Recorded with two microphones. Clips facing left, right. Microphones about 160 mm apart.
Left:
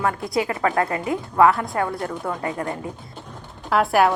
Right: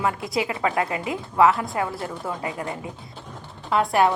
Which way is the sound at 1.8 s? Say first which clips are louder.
Left 3 dB; 5° right (ahead or behind).